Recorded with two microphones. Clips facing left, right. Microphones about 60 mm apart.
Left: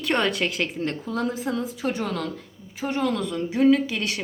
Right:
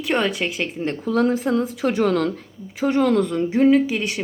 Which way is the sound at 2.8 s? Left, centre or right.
Right.